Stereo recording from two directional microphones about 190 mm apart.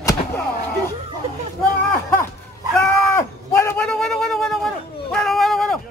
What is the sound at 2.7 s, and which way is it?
Cattle, 5° left (ahead or behind).